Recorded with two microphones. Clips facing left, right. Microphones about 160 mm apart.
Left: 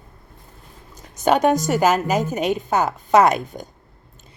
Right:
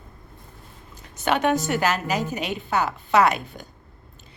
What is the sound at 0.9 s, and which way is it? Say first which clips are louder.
A woman's voice: left 6 dB; 40° left (ahead or behind).